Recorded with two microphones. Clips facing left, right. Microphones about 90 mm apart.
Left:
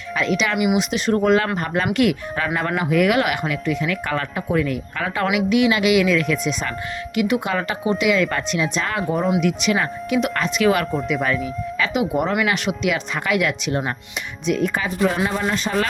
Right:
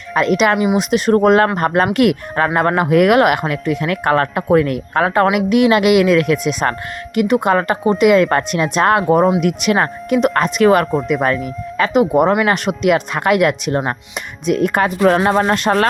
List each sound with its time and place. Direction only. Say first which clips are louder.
0.1 s speech: right 7 dB; 50° right (ahead or behind)
0.5 s speech: right 4 dB; 30° right (ahead or behind)
0.8 s speech: right 6 dB; 45° right (ahead or behind)
7.2 s speech: right 7 dB; 45° right (ahead or behind)
9.1 s speech: right 7 dB; 35° right (ahead or behind)
9.4 s speech: right 4 dB; 50° right (ahead or behind)
14.4 s speech: right 6 dB; 55° right (ahead or behind)